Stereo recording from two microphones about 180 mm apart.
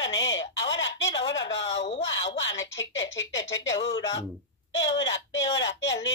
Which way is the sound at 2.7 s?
90° left.